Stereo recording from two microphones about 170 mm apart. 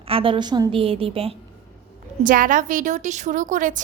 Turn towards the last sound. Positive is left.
turn(degrees=-50)  # may be behind; listen again after turning